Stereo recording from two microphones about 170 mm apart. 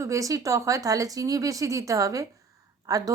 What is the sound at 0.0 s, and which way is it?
A woman's voice, 20° right (ahead or behind).